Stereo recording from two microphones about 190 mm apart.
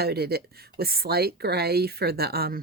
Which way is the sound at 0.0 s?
55° right (ahead or behind).